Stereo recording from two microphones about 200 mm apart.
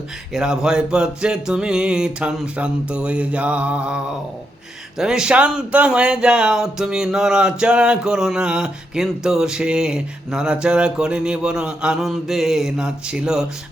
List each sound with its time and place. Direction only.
0.3 s speech: 5° right (ahead or behind)